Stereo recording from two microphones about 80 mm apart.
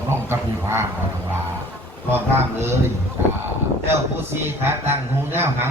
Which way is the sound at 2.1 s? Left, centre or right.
Right.